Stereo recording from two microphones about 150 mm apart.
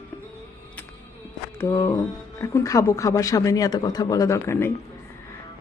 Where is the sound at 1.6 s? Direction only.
20° left (ahead or behind).